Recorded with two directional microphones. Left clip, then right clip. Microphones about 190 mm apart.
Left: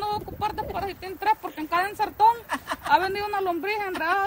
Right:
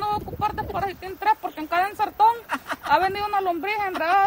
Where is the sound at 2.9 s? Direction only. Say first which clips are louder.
Right 2 dB; 15° right (ahead or behind).